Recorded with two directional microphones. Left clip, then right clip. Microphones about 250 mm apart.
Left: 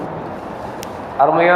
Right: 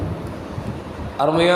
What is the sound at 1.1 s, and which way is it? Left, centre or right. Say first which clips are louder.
Speech: left 4 dB; right.